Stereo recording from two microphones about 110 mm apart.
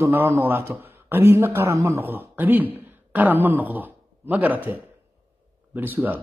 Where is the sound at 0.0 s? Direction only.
20° right (ahead or behind).